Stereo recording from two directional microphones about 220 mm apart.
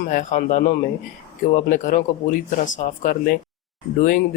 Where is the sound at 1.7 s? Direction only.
35° left (ahead or behind).